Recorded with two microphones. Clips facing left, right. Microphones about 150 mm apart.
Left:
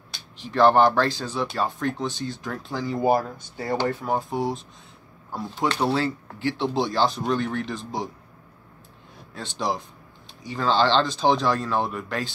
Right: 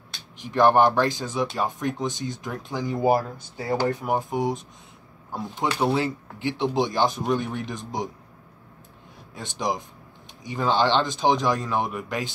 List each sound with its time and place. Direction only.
0.4 s speech: 15° right (ahead or behind)
9.3 s speech: 15° right (ahead or behind)